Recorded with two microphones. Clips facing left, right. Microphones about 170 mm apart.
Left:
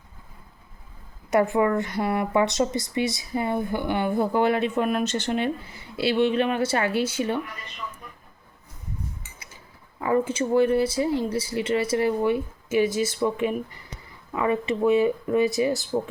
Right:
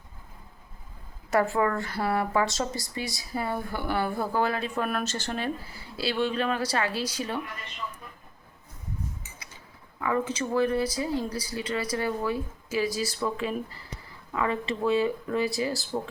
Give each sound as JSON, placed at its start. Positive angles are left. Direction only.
{"t": 1.3, "sound": "speech", "side_deg": 20}
{"t": 10.0, "sound": "speech", "side_deg": 30}